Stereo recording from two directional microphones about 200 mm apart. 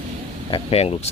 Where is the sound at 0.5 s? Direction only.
30° left (ahead or behind).